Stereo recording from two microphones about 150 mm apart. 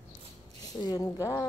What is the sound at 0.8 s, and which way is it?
Speech, 25° left (ahead or behind).